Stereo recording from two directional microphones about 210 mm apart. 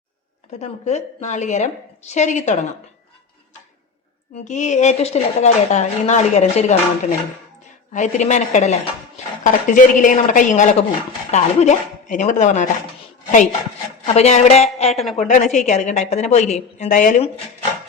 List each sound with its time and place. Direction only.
0.6 s speech: 35° left (ahead or behind)
4.4 s speech: 35° left (ahead or behind)
14.0 s speech: 30° left (ahead or behind)